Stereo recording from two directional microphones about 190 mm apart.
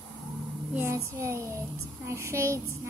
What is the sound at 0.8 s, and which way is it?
Speech, 15° right (ahead or behind).